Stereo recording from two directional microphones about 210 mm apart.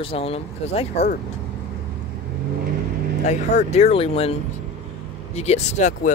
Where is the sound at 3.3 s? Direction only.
30° left (ahead or behind).